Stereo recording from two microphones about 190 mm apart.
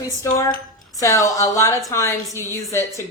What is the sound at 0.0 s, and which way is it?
A woman's voice, 15° left (ahead or behind).